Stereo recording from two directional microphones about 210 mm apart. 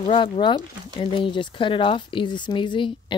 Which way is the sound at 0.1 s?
20° left (ahead or behind).